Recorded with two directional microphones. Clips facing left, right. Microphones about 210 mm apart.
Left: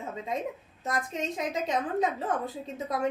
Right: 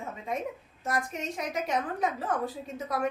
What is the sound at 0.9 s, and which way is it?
A woman's voice, 20° left (ahead or behind).